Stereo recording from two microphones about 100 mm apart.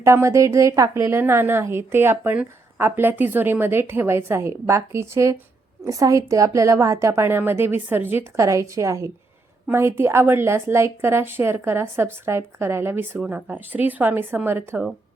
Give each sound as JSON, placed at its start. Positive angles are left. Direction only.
{"t": 0.0, "sound": "a woman's voice", "side_deg": -30}